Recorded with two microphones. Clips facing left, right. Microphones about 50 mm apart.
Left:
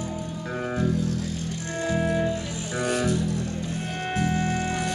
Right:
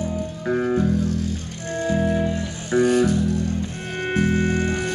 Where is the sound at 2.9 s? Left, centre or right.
Right.